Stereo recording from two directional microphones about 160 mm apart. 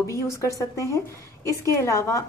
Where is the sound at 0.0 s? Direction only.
20° left (ahead or behind).